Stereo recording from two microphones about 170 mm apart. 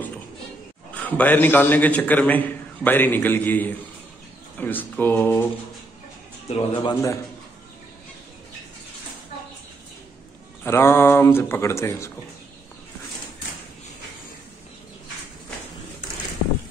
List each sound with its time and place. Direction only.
0.9 s a man's voice: 10° left (ahead or behind)
6.5 s speech: 30° left (ahead or behind)
10.6 s a man's voice: 15° left (ahead or behind)